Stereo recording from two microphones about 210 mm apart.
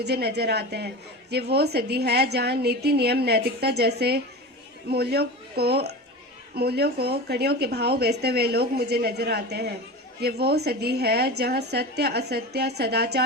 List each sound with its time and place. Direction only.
0.0 s speech: 50° right (ahead or behind)